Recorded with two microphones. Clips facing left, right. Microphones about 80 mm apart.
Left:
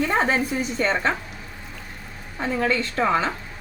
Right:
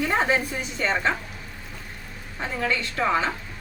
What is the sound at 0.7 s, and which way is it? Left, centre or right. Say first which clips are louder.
Speech: left 1 dB; left.